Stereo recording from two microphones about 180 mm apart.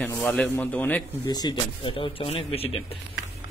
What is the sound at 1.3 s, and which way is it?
Speech, 25° left (ahead or behind).